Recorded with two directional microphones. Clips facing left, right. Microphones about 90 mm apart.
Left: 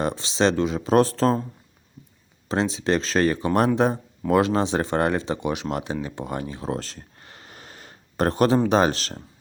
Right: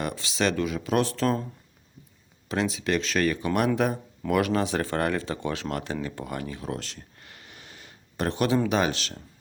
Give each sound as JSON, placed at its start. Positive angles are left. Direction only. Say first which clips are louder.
{"t": 0.0, "sound": "speech", "louder": "left 5 dB", "side_deg": 30}
{"t": 2.5, "sound": "speech", "louder": "left 4 dB", "side_deg": 30}